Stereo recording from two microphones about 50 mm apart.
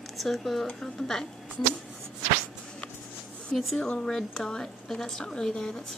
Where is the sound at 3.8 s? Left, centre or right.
Centre.